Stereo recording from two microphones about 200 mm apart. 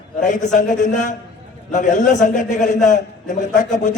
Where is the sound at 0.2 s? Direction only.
40° left (ahead or behind).